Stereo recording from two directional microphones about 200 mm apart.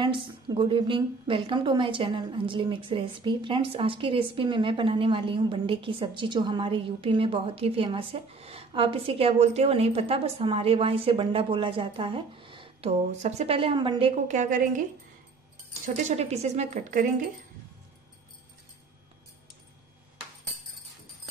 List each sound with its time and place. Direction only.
0.0 s a woman's voice: 25° right (ahead or behind)
15.8 s speech: 35° right (ahead or behind)